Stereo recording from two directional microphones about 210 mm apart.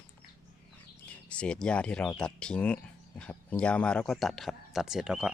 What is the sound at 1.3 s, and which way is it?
Speech, 5° left (ahead or behind).